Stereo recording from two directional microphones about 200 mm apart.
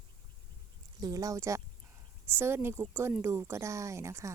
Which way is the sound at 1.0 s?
20° right (ahead or behind).